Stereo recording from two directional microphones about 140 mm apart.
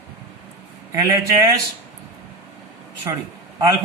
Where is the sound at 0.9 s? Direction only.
25° right (ahead or behind).